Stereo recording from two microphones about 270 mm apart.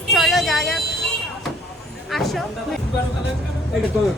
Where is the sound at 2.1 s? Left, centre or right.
Centre.